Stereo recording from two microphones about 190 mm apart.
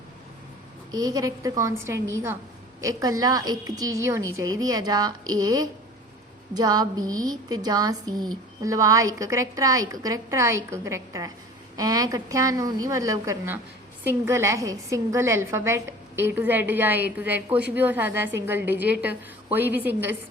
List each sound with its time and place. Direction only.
0.9 s a woman's voice: 20° right (ahead or behind)